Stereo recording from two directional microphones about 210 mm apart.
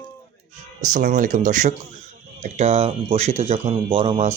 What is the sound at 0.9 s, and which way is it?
Speech, 40° right (ahead or behind).